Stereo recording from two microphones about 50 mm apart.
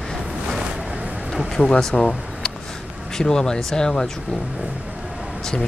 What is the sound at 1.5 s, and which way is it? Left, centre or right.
Speech, centre.